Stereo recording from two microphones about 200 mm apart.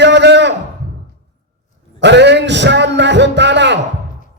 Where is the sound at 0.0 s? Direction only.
60° right (ahead or behind).